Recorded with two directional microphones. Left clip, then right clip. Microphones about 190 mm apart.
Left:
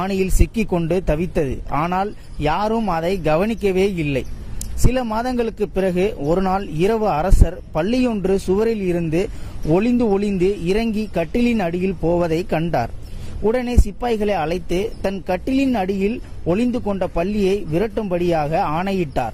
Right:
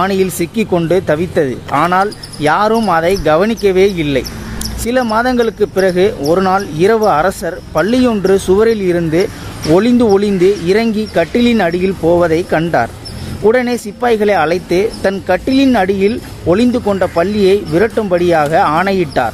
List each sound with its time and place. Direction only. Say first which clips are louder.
0.0 s speech: right 8 dB; 40° left (ahead or behind)
8.6 s speech: right 8 dB; 40° left (ahead or behind)